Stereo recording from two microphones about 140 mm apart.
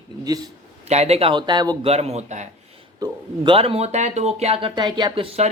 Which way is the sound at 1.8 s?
50° right (ahead or behind).